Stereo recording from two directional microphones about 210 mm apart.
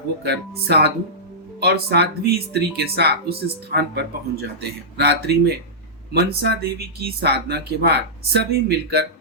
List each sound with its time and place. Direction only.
0.3 s speech: 50° right (ahead or behind)